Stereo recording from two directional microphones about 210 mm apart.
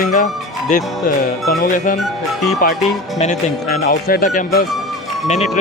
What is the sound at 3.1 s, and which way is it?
Speech, 35° left (ahead or behind).